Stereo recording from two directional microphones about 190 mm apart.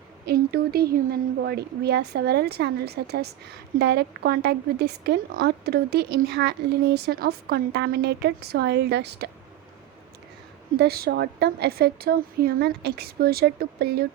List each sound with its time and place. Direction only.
0.3 s a woman's voice: 55° right (ahead or behind)
10.8 s a woman's voice: 55° right (ahead or behind)